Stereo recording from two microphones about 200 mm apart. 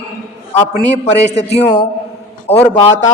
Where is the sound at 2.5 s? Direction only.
10° left (ahead or behind).